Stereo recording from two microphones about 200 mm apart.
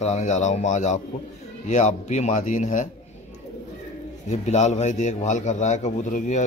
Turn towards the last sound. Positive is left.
turn(degrees=35)  # may be behind; listen again after turning